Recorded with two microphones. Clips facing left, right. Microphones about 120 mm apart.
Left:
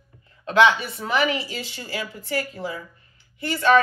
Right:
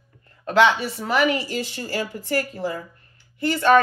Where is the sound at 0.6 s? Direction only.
30° right (ahead or behind).